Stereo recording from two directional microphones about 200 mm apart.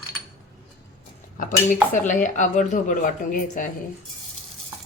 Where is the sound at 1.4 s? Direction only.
40° left (ahead or behind).